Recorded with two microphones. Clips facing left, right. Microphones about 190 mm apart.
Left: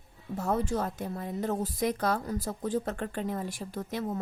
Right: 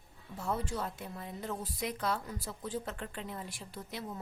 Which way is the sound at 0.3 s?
45° left (ahead or behind).